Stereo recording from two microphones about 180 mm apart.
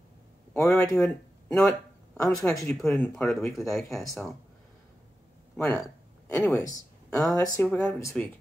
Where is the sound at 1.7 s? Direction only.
15° left (ahead or behind).